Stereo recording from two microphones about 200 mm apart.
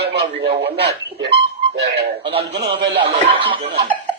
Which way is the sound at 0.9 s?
60° right (ahead or behind).